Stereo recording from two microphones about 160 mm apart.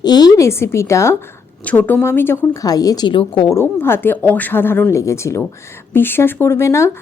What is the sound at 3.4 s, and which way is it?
A woman's voice, 15° left (ahead or behind).